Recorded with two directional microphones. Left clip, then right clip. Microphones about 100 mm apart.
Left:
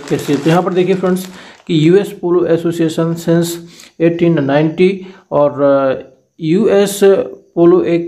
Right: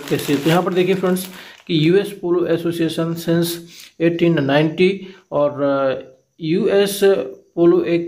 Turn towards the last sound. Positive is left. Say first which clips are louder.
# left 5 dB
turn(degrees=45)  # may be behind; listen again after turning